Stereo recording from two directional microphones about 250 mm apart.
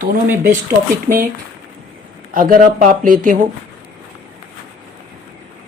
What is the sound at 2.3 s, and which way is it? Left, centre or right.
Speech, right.